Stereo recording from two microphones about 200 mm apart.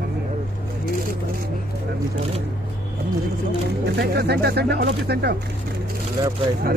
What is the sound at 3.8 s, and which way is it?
Speech, 55° right (ahead or behind).